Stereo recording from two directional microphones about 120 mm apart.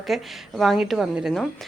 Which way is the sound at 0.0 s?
Centre (ahead or behind).